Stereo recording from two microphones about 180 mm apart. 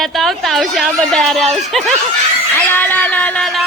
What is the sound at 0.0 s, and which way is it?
A woman's voice, centre (ahead or behind).